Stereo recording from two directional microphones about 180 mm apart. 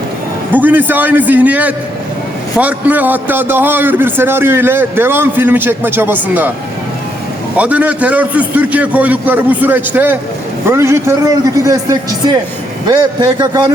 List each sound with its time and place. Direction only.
0.5 s a man's voice: 10° right (ahead or behind)
7.5 s a man's voice: 10° right (ahead or behind)